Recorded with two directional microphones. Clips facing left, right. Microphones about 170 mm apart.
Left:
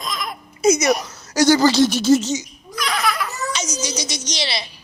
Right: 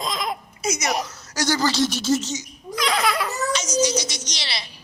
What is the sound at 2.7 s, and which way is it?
Laughter, 25° right (ahead or behind).